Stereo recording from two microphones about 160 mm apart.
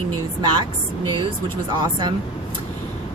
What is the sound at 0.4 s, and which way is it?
Speech, 30° right (ahead or behind).